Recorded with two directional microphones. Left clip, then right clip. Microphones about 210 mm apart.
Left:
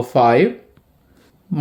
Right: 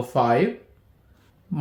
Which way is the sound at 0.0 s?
35° left (ahead or behind).